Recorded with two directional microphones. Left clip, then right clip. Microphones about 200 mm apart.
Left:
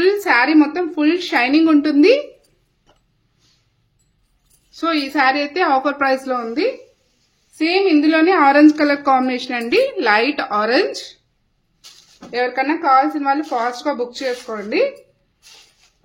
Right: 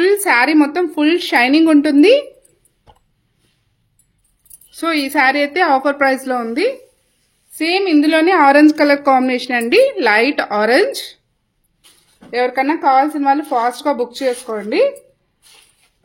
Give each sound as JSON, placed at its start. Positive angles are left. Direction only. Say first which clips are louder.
{"t": 0.0, "sound": "speech", "louder": "right 2 dB", "side_deg": -45}
{"t": 4.7, "sound": "a woman's voice", "louder": "right 2 dB", "side_deg": -40}
{"t": 12.3, "sound": "speech", "louder": "right 3 dB", "side_deg": -40}